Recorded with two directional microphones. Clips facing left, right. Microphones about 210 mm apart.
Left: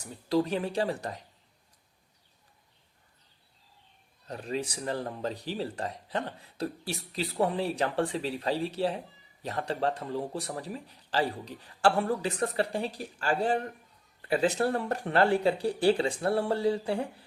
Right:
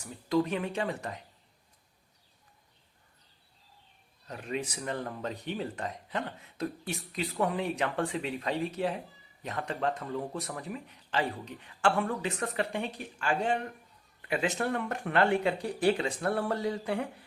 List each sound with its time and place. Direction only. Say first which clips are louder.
0.0 s speech: left 1 dB; 35° left (ahead or behind)
4.3 s speech: left 2 dB; 35° left (ahead or behind)